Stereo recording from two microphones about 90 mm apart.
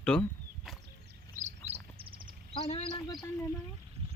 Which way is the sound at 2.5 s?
75° left (ahead or behind).